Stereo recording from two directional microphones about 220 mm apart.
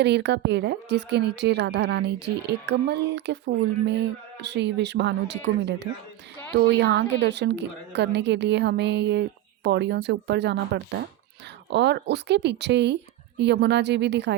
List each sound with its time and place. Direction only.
0.0 s a woman's voice: 50° right (ahead or behind)
11.7 s a woman's voice: 50° right (ahead or behind)